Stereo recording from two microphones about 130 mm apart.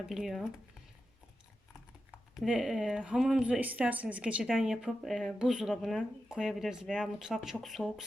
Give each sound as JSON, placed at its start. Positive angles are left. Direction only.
{"t": 0.1, "sound": "speech", "side_deg": 0}
{"t": 2.3, "sound": "speech", "side_deg": -5}